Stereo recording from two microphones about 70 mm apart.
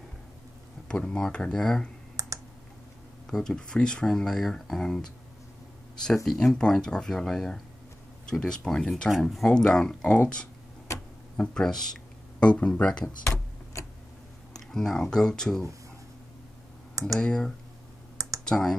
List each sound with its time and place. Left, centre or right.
0.8 s speech: centre
2.1 s computer keyboard: right
3.3 s speech: centre
6.2 s speech: centre
11.3 s speech: centre
13.2 s a sound: left
14.5 s speech: centre
17.2 s speech: centre
18.1 s computer keyboard: right
18.4 s speech: centre